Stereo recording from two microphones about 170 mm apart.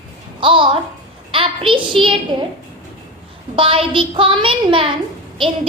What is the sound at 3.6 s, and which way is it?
A woman's voice, 30° right (ahead or behind).